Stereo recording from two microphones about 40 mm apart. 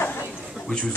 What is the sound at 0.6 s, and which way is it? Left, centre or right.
Speech, centre.